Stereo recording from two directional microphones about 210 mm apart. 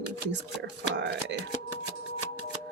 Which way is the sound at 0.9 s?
55° right (ahead or behind).